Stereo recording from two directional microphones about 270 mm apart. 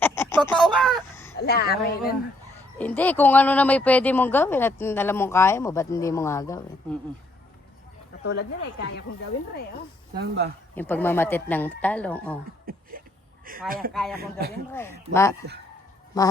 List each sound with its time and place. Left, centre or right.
0.0 s a sound: centre
1.4 s speech: left
2.7 s speech: centre
8.3 s speech: left
10.2 s speech: right
10.8 s speech: centre
12.7 s a sound: right
13.5 s speech: right
13.9 s speech: centre
14.2 s speech: right
14.7 s speech: centre